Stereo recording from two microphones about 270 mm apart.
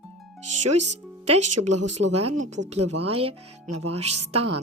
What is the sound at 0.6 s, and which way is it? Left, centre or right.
Speech, right.